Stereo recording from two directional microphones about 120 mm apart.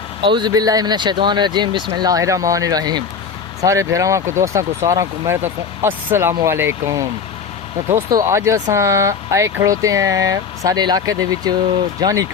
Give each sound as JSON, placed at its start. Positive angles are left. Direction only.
{"t": 0.2, "sound": "speech", "side_deg": -40}
{"t": 8.3, "sound": "speech", "side_deg": -25}